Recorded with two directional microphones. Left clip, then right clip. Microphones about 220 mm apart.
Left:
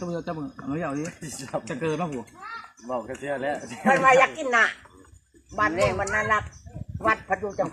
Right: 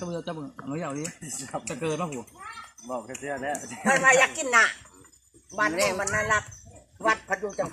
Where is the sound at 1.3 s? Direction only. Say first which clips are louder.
Left 4 dB; 35° left (ahead or behind).